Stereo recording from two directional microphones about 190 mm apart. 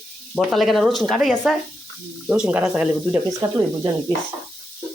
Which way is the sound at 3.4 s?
25° right (ahead or behind).